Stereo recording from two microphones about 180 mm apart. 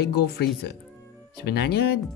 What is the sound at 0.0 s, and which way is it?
Speech, 65° left (ahead or behind).